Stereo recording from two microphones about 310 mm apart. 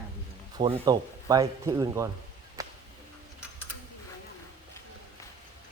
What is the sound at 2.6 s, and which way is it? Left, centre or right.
Whip, centre.